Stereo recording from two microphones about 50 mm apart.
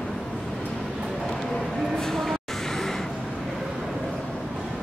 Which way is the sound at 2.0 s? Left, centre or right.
Centre.